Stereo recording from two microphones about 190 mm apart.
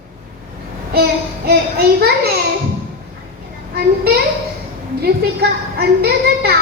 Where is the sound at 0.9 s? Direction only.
55° right (ahead or behind).